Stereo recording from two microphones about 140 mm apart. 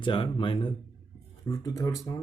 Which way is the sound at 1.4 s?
25° left (ahead or behind).